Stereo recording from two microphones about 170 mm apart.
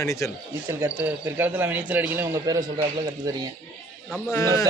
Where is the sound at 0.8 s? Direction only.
10° right (ahead or behind).